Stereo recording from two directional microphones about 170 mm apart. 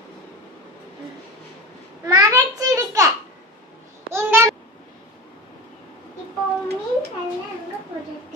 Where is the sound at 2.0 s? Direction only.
20° right (ahead or behind).